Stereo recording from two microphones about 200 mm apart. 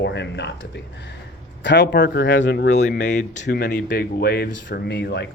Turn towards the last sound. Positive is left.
turn(degrees=60)  # may be behind; listen again after turning